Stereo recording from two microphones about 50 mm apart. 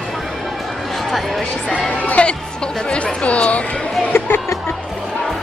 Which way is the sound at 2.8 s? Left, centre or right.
Left.